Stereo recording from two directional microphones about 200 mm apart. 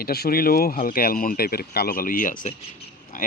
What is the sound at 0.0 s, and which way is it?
Speech, 50° left (ahead or behind).